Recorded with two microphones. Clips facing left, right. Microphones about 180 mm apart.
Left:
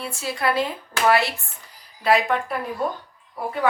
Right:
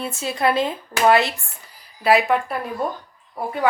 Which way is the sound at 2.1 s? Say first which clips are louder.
Right 3 dB; 10° right (ahead or behind).